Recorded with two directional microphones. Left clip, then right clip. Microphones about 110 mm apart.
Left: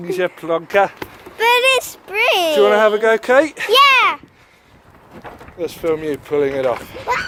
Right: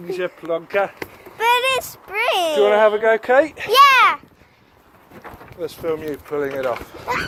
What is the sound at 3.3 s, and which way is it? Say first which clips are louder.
Speech: left 2 dB; 90° left.